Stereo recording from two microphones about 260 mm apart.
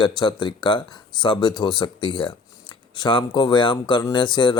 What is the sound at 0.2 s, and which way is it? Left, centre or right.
A man's voice, centre.